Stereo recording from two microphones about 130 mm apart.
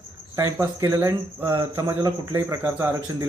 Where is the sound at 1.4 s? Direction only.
35° right (ahead or behind).